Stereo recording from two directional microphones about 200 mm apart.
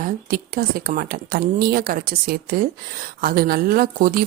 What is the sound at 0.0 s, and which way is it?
Speech, 45° right (ahead or behind).